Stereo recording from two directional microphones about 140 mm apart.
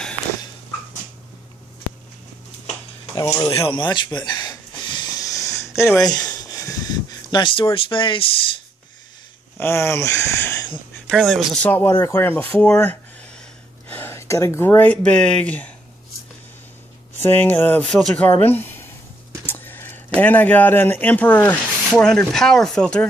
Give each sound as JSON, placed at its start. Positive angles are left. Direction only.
{"t": 3.2, "sound": "speech", "side_deg": 25}
{"t": 3.6, "sound": "a sound", "side_deg": 35}
{"t": 9.6, "sound": "speech", "side_deg": 20}
{"t": 11.1, "sound": "speech", "side_deg": 5}
{"t": 11.6, "sound": "speech", "side_deg": 15}
{"t": 17.2, "sound": "speech", "side_deg": 15}
{"t": 18.5, "sound": "a sound", "side_deg": 15}
{"t": 20.2, "sound": "speech", "side_deg": 10}